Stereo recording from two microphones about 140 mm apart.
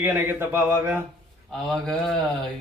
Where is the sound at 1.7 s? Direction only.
Centre (ahead or behind).